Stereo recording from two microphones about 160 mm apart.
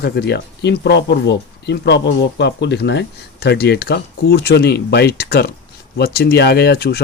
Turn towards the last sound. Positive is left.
turn(degrees=90)